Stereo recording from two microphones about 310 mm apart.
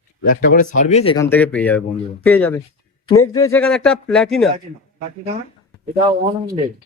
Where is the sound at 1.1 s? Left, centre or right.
Centre.